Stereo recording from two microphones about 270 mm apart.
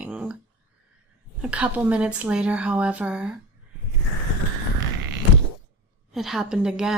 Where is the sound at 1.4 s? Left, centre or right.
Centre.